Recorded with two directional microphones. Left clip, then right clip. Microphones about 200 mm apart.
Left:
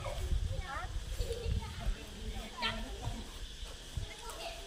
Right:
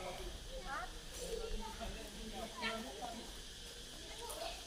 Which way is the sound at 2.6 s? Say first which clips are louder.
Left 5 dB; 55° left (ahead or behind).